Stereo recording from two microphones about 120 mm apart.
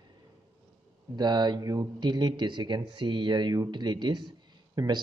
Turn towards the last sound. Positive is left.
turn(degrees=-35)  # may be behind; listen again after turning